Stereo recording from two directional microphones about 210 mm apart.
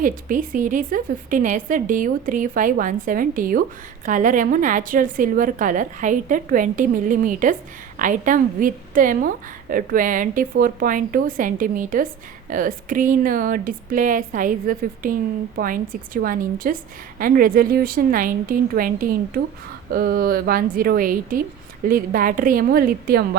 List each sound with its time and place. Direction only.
0.0 s a woman's voice: 40° right (ahead or behind)